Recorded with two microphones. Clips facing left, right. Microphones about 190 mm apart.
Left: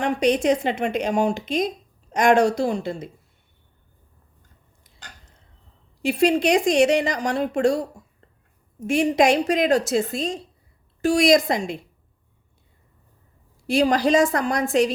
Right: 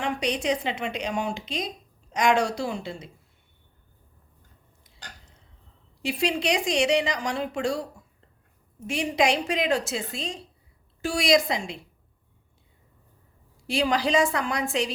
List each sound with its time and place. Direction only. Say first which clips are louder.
0.0 s a woman's voice: left 7 dB; 50° left (ahead or behind)
6.0 s a woman's voice: left 8 dB; 50° left (ahead or behind)
8.9 s a woman's voice: left 6 dB; 45° left (ahead or behind)
13.7 s a woman's voice: left 6 dB; 45° left (ahead or behind)